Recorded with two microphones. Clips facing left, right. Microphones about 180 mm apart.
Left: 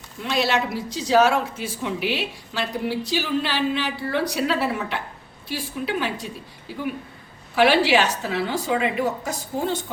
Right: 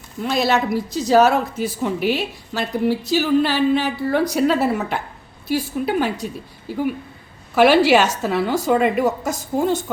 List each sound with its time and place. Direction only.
0.2 s a woman's voice: 45° right (ahead or behind)